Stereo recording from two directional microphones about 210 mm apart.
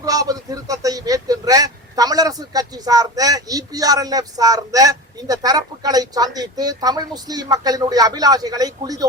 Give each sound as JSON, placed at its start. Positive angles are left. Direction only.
{"t": 0.0, "sound": "speech", "side_deg": -15}